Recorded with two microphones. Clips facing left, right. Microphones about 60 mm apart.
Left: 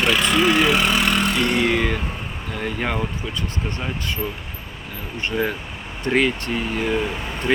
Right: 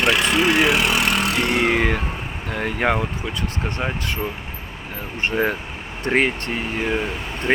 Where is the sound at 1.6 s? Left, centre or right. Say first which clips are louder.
Right 1 dB; right.